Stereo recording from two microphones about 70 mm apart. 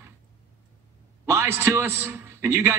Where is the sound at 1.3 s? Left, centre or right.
Right.